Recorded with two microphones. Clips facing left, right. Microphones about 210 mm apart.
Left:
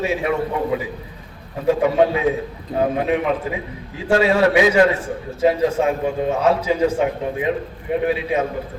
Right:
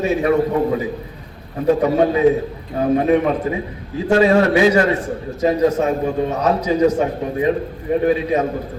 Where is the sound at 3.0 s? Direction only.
40° right (ahead or behind).